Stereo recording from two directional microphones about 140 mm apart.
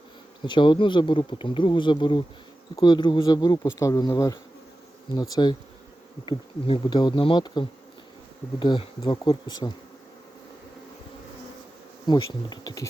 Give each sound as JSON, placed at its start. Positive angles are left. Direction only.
{"t": 0.4, "sound": "speech", "side_deg": 35}
{"t": 12.0, "sound": "speech", "side_deg": 30}